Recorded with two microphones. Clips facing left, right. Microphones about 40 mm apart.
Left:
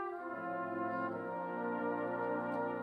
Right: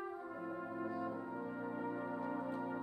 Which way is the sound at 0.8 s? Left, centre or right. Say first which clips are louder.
Left 4 dB; left.